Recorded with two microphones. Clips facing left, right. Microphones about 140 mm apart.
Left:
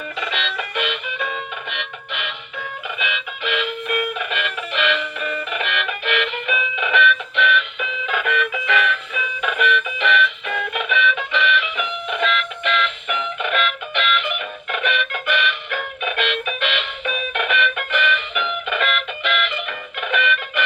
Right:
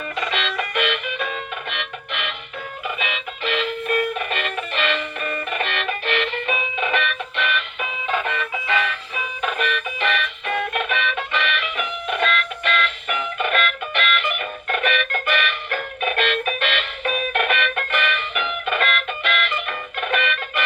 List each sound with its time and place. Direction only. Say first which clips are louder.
0.2 s music: right 2 dB; 45° right (ahead or behind)